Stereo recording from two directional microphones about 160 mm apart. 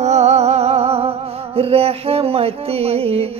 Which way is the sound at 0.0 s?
45° right (ahead or behind).